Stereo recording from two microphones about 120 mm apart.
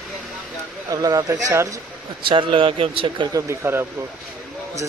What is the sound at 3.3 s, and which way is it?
Speech, 25° right (ahead or behind).